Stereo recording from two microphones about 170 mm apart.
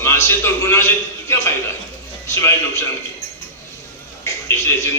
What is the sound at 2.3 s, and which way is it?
Speech, 15° left (ahead or behind).